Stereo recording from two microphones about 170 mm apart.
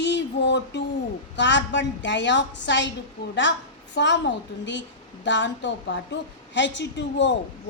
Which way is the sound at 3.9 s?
90° left.